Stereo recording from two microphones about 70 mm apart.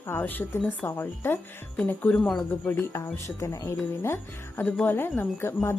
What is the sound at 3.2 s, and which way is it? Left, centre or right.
Speech, left.